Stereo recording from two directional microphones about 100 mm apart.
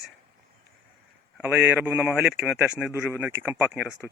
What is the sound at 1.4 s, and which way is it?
A man's voice, 15° right (ahead or behind).